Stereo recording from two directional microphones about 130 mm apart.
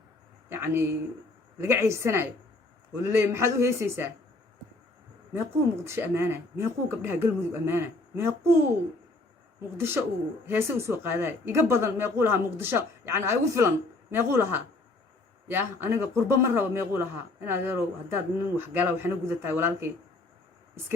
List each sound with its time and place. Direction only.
0.5 s speech: 15° right (ahead or behind)
5.8 s speech: 20° right (ahead or behind)
9.7 s a man's voice: 20° right (ahead or behind)